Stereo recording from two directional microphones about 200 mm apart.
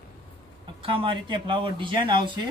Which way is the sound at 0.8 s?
25° right (ahead or behind).